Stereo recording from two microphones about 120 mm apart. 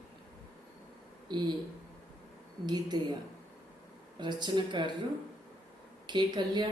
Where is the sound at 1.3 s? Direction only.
40° right (ahead or behind).